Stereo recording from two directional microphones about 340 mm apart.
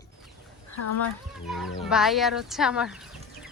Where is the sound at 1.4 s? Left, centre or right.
Centre.